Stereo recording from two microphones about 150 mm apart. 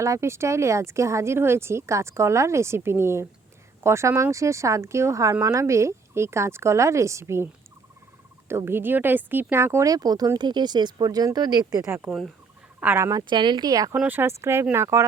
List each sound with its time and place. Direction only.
0.0 s speech: 20° right (ahead or behind)
8.4 s speech: 15° right (ahead or behind)
13.9 s speech: 10° right (ahead or behind)